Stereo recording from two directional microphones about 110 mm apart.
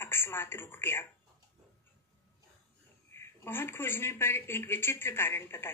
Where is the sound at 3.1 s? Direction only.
20° left (ahead or behind).